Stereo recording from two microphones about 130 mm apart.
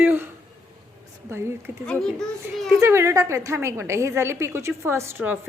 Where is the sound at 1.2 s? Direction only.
20° right (ahead or behind).